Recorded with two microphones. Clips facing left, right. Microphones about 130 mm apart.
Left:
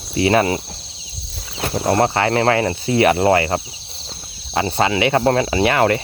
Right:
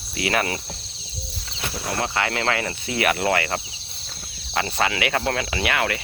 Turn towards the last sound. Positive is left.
turn(degrees=35)  # may be behind; listen again after turning